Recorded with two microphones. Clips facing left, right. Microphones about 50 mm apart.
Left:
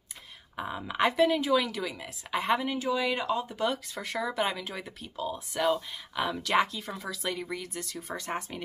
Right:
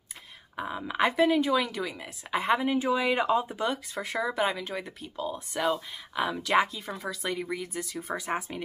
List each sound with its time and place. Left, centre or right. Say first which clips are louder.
0.6 s speech: right 1 dB; centre
2.7 s speech: right 3 dB; centre
3.5 s speech: even; centre